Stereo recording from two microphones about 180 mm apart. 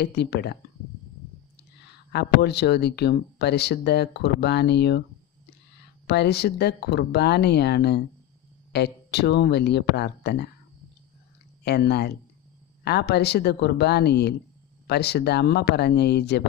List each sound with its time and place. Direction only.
0.0 s speech: 65° left (ahead or behind)
2.1 s speech: 65° left (ahead or behind)
6.0 s speech: 65° left (ahead or behind)
11.6 s speech: 65° left (ahead or behind)